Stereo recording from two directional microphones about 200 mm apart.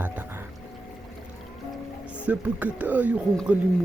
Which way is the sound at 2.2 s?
5° right (ahead or behind).